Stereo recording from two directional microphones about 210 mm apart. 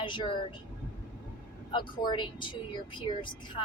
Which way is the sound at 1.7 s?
20° left (ahead or behind).